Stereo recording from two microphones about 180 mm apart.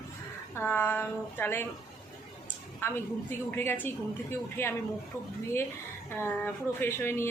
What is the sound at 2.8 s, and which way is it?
Speech, 10° left (ahead or behind).